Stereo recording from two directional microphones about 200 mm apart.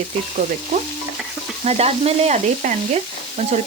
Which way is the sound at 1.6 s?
30° right (ahead or behind).